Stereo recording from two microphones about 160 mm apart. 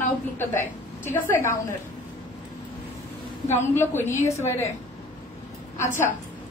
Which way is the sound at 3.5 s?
15° left (ahead or behind).